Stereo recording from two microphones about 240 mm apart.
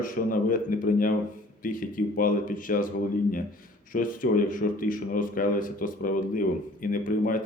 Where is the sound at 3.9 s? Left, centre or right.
Left.